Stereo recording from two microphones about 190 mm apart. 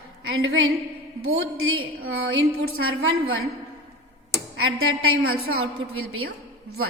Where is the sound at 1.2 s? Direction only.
90° right.